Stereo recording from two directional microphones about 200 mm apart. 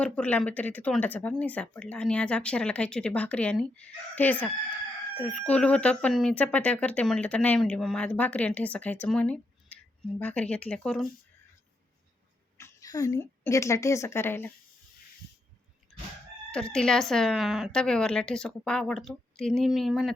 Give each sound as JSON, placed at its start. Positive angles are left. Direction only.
{"t": 0.0, "sound": "speech", "side_deg": 5}
{"t": 12.5, "sound": "a woman's voice", "side_deg": 15}
{"t": 15.9, "sound": "chicken", "side_deg": 0}
{"t": 16.5, "sound": "speech", "side_deg": 5}